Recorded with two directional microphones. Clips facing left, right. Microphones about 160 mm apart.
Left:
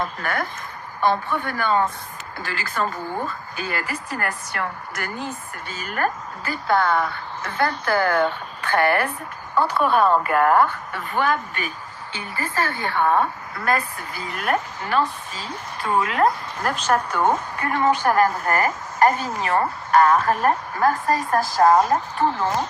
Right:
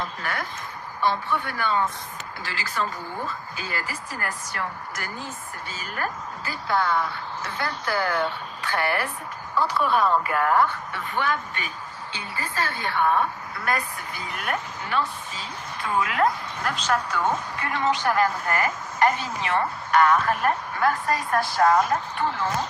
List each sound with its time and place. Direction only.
0.0 s a woman's voice: 50° left (ahead or behind)
12.8 s a woman's voice: 50° left (ahead or behind)
14.4 s a woman's voice: 45° left (ahead or behind)